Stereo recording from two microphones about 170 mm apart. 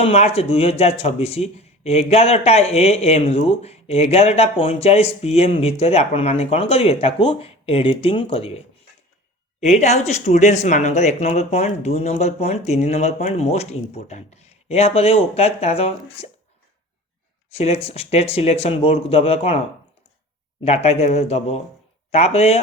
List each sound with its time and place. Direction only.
0.0 s speech: 35° left (ahead or behind)
17.5 s speech: 35° left (ahead or behind)
20.7 s speech: 40° left (ahead or behind)